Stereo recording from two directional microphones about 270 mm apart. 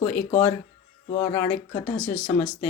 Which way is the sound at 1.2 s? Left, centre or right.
Centre.